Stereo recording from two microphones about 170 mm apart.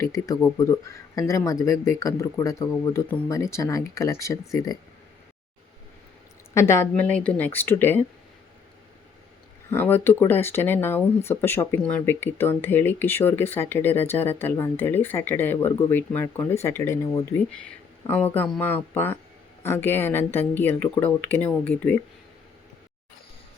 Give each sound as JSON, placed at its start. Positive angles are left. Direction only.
{"t": 0.0, "sound": "speech", "side_deg": 20}
{"t": 6.5, "sound": "speech", "side_deg": 15}
{"t": 9.6, "sound": "speech", "side_deg": 10}